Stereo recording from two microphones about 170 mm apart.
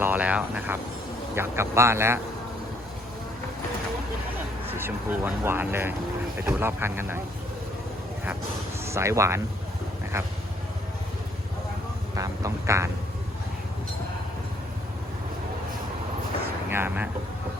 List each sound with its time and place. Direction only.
0.0 s a sound: 10° right (ahead or behind)
1.4 s speech: 15° right (ahead or behind)
4.7 s speech: 10° right (ahead or behind)
8.8 s speech: 15° right (ahead or behind)
12.1 s a sound: 20° right (ahead or behind)
16.6 s speech: 10° right (ahead or behind)